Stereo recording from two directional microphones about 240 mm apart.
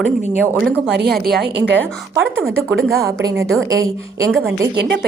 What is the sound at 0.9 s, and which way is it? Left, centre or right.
Speech, right.